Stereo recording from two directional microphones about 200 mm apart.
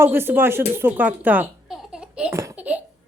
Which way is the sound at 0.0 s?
10° right (ahead or behind).